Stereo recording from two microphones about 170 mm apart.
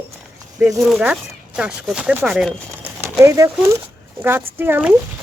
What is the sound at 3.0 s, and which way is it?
Speech, 15° right (ahead or behind).